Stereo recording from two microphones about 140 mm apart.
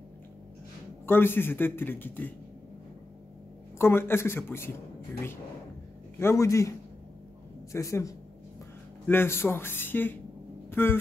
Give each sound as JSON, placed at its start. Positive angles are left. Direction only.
{"t": 1.0, "sound": "a man's voice", "side_deg": 15}
{"t": 3.7, "sound": "a man's voice", "side_deg": 15}
{"t": 6.1, "sound": "a man's voice", "side_deg": 20}
{"t": 7.7, "sound": "a man's voice", "side_deg": 20}
{"t": 10.7, "sound": "music", "side_deg": 15}